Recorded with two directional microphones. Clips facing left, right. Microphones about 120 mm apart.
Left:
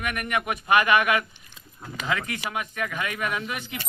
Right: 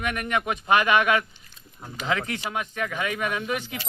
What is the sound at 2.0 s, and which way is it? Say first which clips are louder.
A man's voice: right 2 dB; 25° right (ahead or behind).